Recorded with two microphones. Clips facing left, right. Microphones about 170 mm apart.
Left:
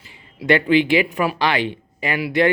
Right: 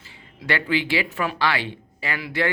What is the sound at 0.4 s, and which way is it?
Speech, 20° left (ahead or behind).